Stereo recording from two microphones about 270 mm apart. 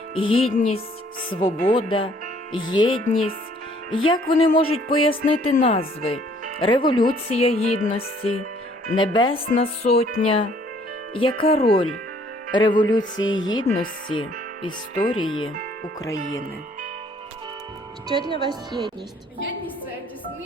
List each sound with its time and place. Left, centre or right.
0.1 s music: centre
1.3 s speech: centre
3.9 s music: centre
9.0 s speech: centre
9.5 s music: left
12.5 s speech: centre
18.4 s speech: centre